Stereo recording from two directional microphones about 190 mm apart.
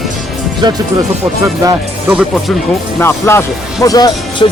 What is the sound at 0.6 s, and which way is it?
Speech, 20° right (ahead or behind).